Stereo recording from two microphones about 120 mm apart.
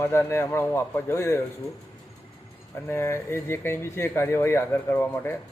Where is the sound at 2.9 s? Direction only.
20° left (ahead or behind).